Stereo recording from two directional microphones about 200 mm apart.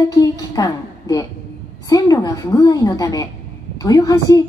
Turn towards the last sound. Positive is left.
turn(degrees=20)  # may be behind; listen again after turning